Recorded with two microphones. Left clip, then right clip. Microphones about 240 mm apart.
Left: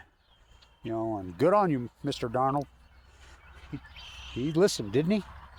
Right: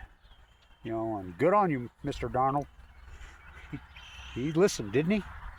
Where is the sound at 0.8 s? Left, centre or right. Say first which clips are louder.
Left 1 dB; centre.